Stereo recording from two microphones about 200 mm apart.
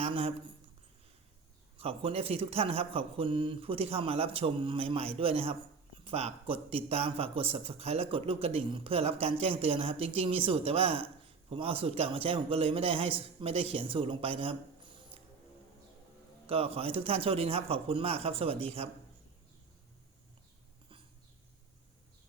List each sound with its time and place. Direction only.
0.0 s speech: 30° right (ahead or behind)
1.8 s speech: 30° right (ahead or behind)
16.5 s speech: 30° right (ahead or behind)